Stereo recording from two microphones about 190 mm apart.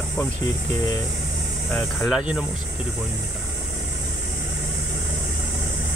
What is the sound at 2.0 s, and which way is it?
Speech, centre (ahead or behind).